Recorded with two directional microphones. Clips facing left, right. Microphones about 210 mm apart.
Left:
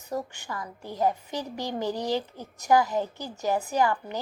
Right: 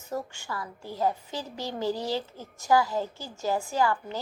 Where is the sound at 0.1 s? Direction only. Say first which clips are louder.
Left 1 dB; 15° left (ahead or behind).